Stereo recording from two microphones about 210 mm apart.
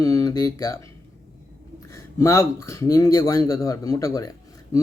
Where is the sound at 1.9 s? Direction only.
15° left (ahead or behind).